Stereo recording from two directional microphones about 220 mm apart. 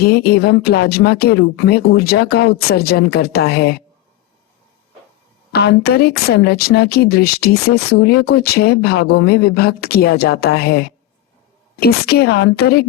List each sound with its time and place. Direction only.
0.0 s speech: 45° left (ahead or behind)
5.5 s speech: 45° left (ahead or behind)